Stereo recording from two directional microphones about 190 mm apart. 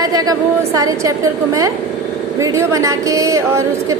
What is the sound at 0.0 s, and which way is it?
A woman's voice, 20° right (ahead or behind).